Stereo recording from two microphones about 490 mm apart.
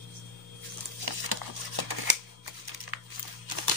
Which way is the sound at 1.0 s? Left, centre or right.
Right.